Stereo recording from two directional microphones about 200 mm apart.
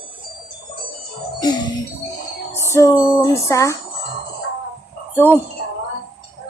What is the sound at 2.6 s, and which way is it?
Speech, 15° left (ahead or behind).